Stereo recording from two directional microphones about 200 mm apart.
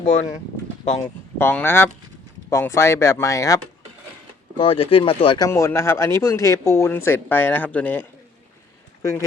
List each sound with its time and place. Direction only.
1.4 s speech: 10° left (ahead or behind)
5.5 s speech: 15° left (ahead or behind)